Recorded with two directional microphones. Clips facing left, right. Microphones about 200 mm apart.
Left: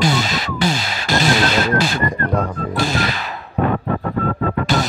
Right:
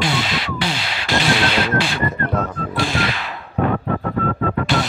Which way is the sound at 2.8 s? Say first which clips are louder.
Left 1 dB; 40° left (ahead or behind).